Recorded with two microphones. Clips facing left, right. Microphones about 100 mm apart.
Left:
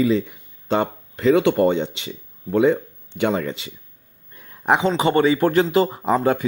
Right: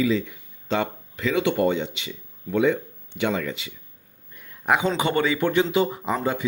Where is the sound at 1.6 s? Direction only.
35° left (ahead or behind).